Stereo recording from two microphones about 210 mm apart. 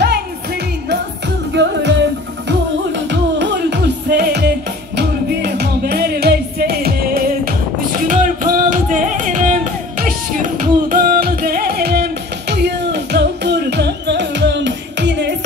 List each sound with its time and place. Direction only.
1.5 s music: 55° right (ahead or behind)